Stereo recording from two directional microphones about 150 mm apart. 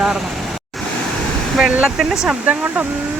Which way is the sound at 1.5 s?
5° right (ahead or behind).